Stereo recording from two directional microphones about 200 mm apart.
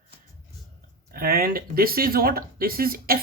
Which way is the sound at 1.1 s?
45° right (ahead or behind).